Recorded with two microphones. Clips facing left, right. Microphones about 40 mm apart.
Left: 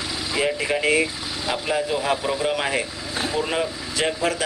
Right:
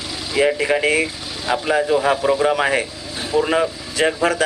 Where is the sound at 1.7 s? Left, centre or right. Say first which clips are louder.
Right 7 dB; right.